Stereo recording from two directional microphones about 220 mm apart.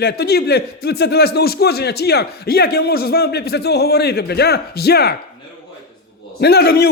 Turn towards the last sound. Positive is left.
turn(degrees=45)  # may be behind; listen again after turning